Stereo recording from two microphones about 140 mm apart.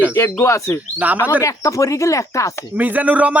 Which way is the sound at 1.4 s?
20° left (ahead or behind).